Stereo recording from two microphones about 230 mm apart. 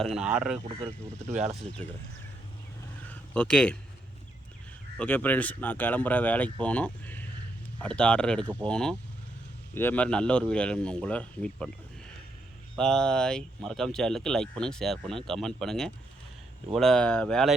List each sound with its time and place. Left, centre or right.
0.0 s speech: centre
1.3 s speech: right
3.1 s a sound: centre
4.9 s speech: centre
12.7 s speech: centre